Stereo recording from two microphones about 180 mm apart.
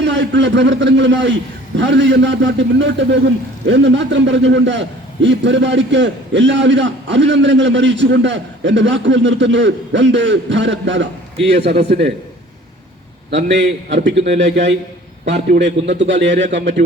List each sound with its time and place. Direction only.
0.0 s a man's voice: 80° right
11.5 s a man's voice: 70° right (ahead or behind)
13.3 s a man's voice: 85° right